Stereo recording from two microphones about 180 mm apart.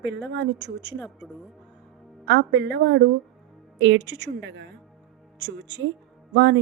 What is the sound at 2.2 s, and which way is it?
A woman's voice, 75° right (ahead or behind).